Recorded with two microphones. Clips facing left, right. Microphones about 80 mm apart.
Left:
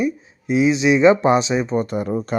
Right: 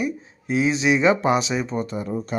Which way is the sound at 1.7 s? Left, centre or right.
Left.